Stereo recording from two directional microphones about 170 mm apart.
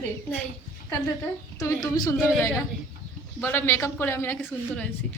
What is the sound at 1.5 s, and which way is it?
Speech, 20° left (ahead or behind).